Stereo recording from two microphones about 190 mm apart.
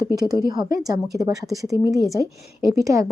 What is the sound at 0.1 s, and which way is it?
A woman's voice, 20° right (ahead or behind).